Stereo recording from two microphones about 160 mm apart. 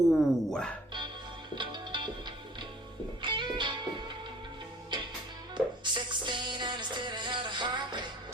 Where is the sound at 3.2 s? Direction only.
30° right (ahead or behind).